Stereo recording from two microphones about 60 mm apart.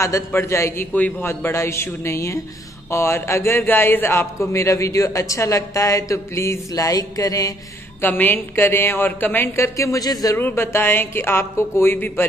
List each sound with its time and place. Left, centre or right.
0.4 s a man's voice: left
3.5 s a man's voice: left
6.7 s music: left
8.0 s speech: left
9.6 s a man's voice: left
10.3 s speech: left